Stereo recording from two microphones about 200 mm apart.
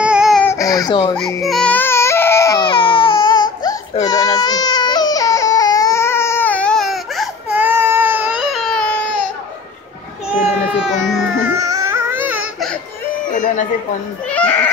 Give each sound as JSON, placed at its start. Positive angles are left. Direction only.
{"t": 0.0, "sound": "a sound", "side_deg": -5}
{"t": 0.4, "sound": "baby cry", "side_deg": 15}
{"t": 1.1, "sound": "baby cry", "side_deg": 0}
{"t": 10.7, "sound": "speech", "side_deg": 0}
{"t": 11.5, "sound": "music", "side_deg": -15}
{"t": 14.3, "sound": "speech", "side_deg": 10}